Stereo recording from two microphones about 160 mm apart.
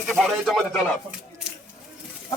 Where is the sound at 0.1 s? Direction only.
Centre (ahead or behind).